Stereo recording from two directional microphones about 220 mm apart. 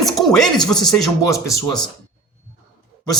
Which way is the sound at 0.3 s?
Centre (ahead or behind).